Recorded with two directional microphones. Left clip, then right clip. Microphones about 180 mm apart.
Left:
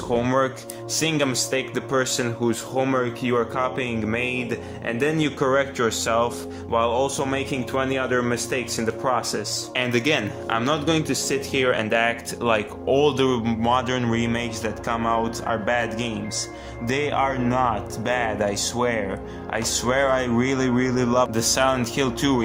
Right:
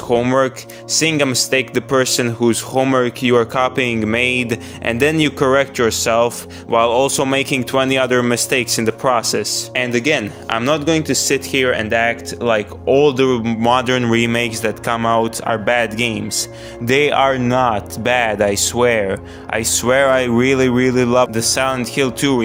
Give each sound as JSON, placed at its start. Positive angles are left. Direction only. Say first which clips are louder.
{"t": 0.1, "sound": "speech", "louder": "right 7 dB", "side_deg": -45}